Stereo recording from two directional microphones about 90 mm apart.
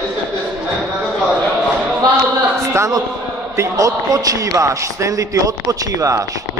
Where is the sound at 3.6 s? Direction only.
40° right (ahead or behind).